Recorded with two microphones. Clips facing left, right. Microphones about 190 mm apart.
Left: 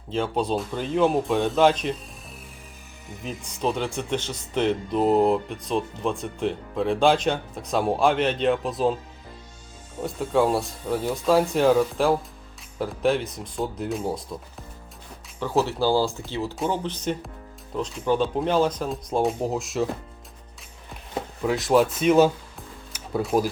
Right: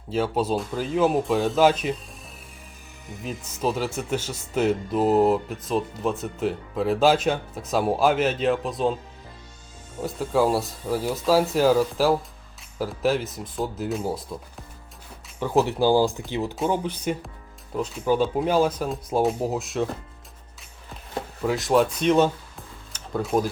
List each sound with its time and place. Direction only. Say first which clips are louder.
0.1 s speech: right 1 dB; 5° right (ahead or behind)
3.2 s speech: even; 5° right (ahead or behind)
10.0 s speech: even; centre (ahead or behind)
15.4 s speech: right 2 dB; 15° right (ahead or behind); by 19.9 s centre (ahead or behind)
21.4 s speech: left 1 dB; centre (ahead or behind)